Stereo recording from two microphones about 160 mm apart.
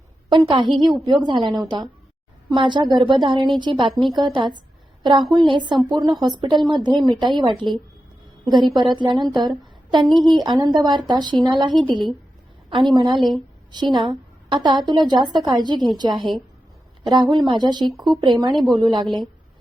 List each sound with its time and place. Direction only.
0.3 s a woman's voice: 30° right (ahead or behind)
9.0 s a woman's voice: 30° right (ahead or behind)
13.1 s a woman's voice: centre (ahead or behind)
13.7 s a woman's voice: 25° right (ahead or behind)
19.0 s a woman's voice: centre (ahead or behind)